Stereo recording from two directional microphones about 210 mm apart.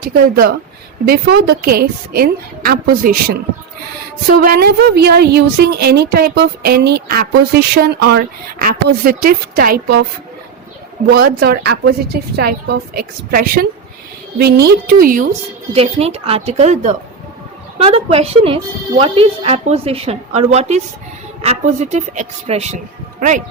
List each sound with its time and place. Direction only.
0.0 s a woman's voice: 45° right (ahead or behind)
11.1 s a woman's voice: 50° right (ahead or behind)
15.7 s a woman's voice: 30° right (ahead or behind)